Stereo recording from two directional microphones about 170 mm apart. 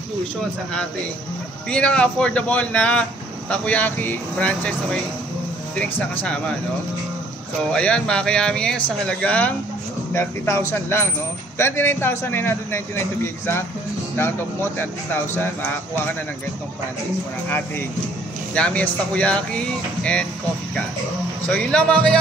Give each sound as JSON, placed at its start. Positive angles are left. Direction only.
{"t": 1.7, "sound": "speech", "side_deg": 5}
{"t": 7.7, "sound": "speech", "side_deg": 5}
{"t": 14.1, "sound": "speech", "side_deg": 15}
{"t": 17.5, "sound": "speech", "side_deg": 10}
{"t": 21.5, "sound": "speech", "side_deg": 5}